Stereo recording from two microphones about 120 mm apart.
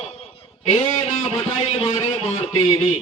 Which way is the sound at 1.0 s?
55° left (ahead or behind).